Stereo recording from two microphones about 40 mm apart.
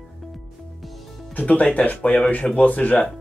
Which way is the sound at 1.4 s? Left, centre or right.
Left.